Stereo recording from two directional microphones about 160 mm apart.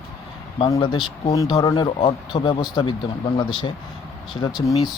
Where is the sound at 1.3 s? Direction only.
20° left (ahead or behind).